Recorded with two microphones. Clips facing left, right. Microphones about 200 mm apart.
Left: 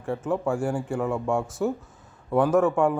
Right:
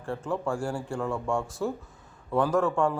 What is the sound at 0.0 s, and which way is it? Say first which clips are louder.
Speech: left 4 dB; 5° left (ahead or behind).